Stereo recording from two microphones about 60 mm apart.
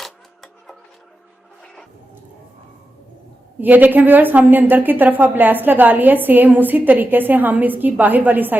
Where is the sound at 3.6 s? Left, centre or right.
Right.